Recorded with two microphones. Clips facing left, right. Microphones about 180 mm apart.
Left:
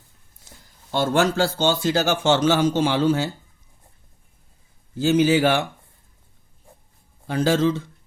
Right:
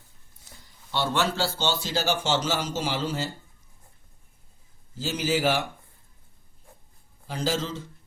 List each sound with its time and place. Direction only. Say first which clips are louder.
0.9 s a man's voice: left 6 dB; 45° left (ahead or behind)
5.0 s a man's voice: left 8 dB; 60° left (ahead or behind)
7.3 s a man's voice: left 9 dB; 60° left (ahead or behind)